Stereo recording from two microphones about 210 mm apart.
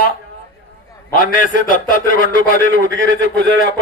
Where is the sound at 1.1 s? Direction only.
40° left (ahead or behind).